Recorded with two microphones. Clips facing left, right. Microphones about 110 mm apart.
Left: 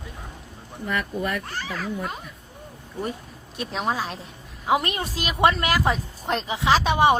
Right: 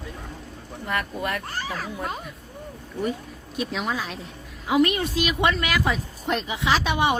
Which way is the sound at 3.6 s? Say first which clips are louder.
Left 1 dB; 35° left (ahead or behind).